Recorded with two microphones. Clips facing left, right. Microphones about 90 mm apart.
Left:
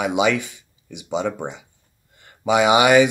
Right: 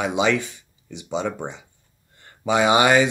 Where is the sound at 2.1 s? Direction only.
15° left (ahead or behind).